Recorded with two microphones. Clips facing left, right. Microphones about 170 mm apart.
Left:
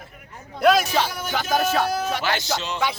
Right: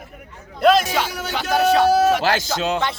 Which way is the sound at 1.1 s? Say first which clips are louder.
Right 2 dB; 80° right.